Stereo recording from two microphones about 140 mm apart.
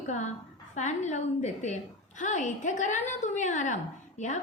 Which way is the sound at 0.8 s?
60° left (ahead or behind).